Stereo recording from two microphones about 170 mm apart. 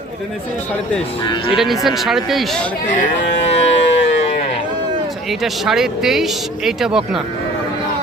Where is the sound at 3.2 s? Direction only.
90° left.